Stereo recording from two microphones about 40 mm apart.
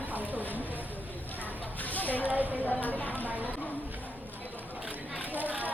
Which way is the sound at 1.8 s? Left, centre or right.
Left.